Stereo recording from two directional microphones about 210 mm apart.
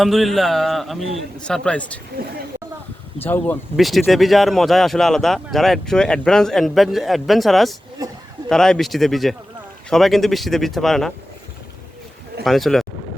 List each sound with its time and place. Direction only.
0.0 s speech: centre (ahead or behind)
3.2 s speech: 10° left (ahead or behind)
8.0 s a sound: 15° right (ahead or behind)
8.4 s speech: 5° left (ahead or behind)
12.5 s speech: centre (ahead or behind)